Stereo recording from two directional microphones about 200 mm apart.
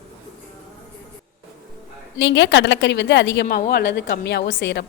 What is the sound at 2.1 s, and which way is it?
A woman's voice, 65° left (ahead or behind).